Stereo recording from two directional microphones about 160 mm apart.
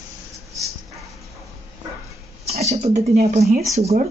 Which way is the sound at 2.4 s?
40° right (ahead or behind).